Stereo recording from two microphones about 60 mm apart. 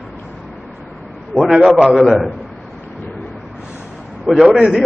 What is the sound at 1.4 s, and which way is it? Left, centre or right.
Speech, centre.